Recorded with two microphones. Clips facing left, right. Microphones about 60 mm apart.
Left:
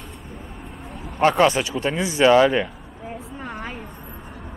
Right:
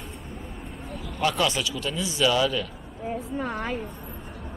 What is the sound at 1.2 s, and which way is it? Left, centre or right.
Speech, left.